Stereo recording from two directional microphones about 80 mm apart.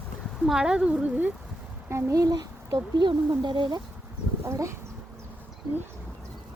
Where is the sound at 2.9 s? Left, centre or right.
Right.